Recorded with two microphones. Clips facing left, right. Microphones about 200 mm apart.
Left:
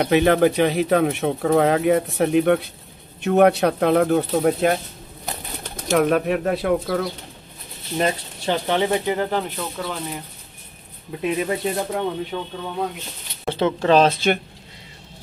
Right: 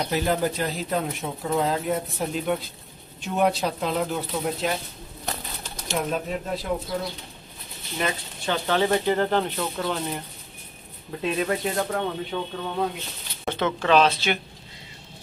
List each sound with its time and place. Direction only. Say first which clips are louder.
0.0 s speech: left 8 dB; 70° left (ahead or behind)
8.0 s speech: left 5 dB; 25° left (ahead or behind); by 10.2 s 5° left (ahead or behind)
11.1 s speech: left 2 dB; 15° left (ahead or behind)
12.3 s speech: left 1 dB; 5° left (ahead or behind)
13.6 s speech: left 4 dB; 30° left (ahead or behind); by 14.4 s 45° left (ahead or behind)